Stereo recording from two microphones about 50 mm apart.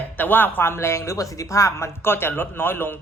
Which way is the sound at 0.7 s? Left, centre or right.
Left.